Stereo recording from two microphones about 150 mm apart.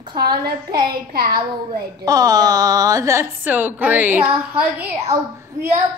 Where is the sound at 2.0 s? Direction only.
25° right (ahead or behind).